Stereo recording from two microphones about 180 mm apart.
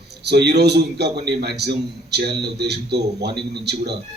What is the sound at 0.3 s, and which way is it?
A man's voice, 65° right (ahead or behind).